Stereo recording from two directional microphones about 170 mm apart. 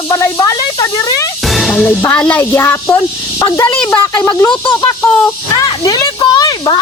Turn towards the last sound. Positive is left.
turn(degrees=25)  # may be behind; listen again after turning